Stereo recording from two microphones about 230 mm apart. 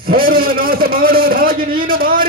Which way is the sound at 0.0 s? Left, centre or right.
Right.